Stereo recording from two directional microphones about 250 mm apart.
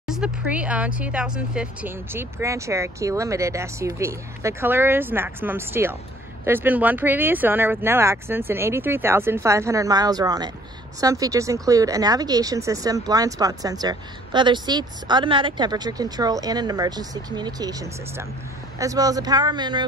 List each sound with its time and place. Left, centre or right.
0.0 s speech: centre